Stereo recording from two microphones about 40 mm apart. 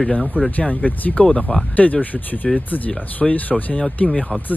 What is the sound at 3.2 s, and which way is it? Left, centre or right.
Speech, left.